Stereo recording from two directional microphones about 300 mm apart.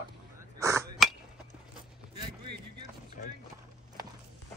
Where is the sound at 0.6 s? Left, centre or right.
Centre.